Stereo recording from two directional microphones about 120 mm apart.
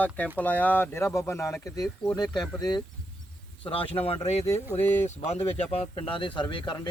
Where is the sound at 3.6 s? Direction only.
55° left (ahead or behind).